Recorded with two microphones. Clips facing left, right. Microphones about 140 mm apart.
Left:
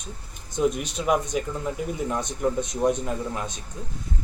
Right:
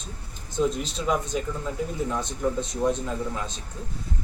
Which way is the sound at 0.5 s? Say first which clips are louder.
Left 1 dB; 15° left (ahead or behind).